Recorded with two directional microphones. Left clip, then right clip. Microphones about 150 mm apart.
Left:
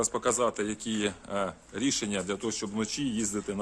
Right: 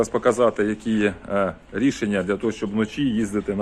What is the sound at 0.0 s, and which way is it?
Speech, 5° left (ahead or behind).